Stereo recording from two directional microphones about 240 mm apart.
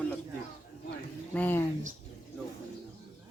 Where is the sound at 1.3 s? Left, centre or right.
Centre.